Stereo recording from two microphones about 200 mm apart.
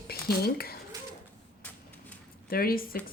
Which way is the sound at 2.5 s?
50° left (ahead or behind).